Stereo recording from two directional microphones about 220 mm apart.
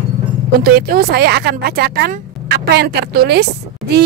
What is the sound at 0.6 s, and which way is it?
A woman's voice, 40° right (ahead or behind).